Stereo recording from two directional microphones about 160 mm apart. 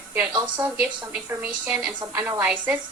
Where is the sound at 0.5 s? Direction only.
10° right (ahead or behind).